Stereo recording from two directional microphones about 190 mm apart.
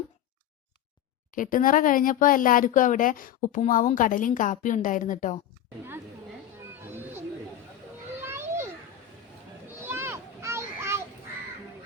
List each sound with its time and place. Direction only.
1.4 s speech: 45° left (ahead or behind)
6.9 s a sound: 10° right (ahead or behind)
8.2 s children playing: 15° right (ahead or behind)
9.8 s children playing: 15° right (ahead or behind)